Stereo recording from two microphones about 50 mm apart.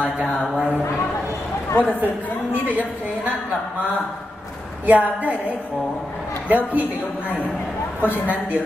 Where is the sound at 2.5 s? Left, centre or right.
Right.